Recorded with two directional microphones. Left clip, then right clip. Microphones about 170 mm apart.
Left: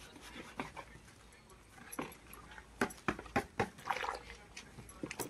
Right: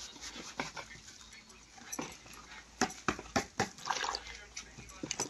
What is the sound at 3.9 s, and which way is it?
Splash, 30° left (ahead or behind).